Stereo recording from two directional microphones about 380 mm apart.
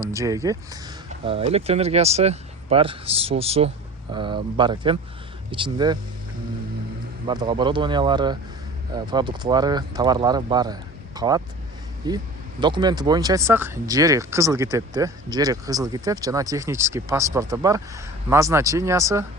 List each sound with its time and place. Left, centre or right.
0.0 s speech: centre
7.3 s speech: centre